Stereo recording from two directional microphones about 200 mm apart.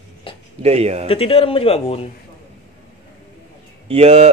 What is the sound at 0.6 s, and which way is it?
Speech, 30° right (ahead or behind).